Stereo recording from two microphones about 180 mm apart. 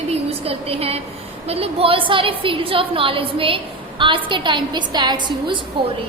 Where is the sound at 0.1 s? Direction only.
35° right (ahead or behind).